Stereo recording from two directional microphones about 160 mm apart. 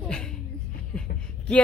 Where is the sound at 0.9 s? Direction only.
5° left (ahead or behind).